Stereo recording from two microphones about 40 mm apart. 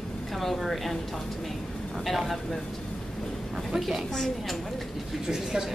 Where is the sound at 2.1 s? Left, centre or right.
Centre.